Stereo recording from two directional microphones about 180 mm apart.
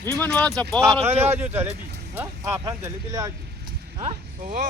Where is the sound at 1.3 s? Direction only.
10° right (ahead or behind).